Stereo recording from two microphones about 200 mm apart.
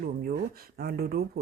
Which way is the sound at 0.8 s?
50° right (ahead or behind).